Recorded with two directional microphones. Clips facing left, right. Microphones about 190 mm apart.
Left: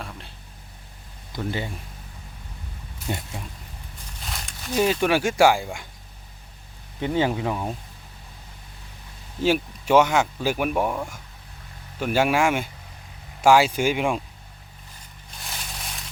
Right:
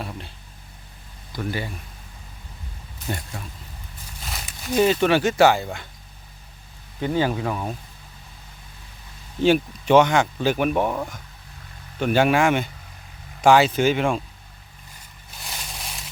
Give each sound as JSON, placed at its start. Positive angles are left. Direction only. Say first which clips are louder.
{"t": 1.3, "sound": "speech", "louder": "even", "side_deg": 20}
{"t": 3.1, "sound": "speech", "louder": "even", "side_deg": 20}
{"t": 4.2, "sound": "a sound", "louder": "even", "side_deg": -5}
{"t": 4.9, "sound": "speech", "louder": "right 3 dB", "side_deg": 5}
{"t": 7.0, "sound": "speech", "louder": "even", "side_deg": 20}
{"t": 9.4, "sound": "speech", "louder": "right 4 dB", "side_deg": 5}